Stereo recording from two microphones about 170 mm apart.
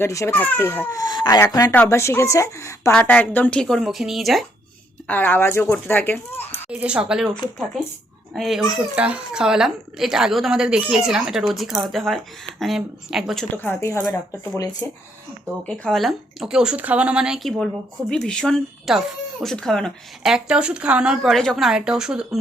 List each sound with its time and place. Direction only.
0.0 s a child's voice: 15° left (ahead or behind); by 4.4 s centre (ahead or behind)
5.0 s speech: 10° left (ahead or behind)
6.7 s a child's voice: 5° right (ahead or behind)
8.3 s a child's voice: centre (ahead or behind); by 14.8 s 20° left (ahead or behind)
15.6 s a child's voice: 5° left (ahead or behind)